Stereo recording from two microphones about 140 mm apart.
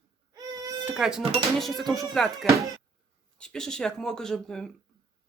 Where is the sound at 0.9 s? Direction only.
5° right (ahead or behind).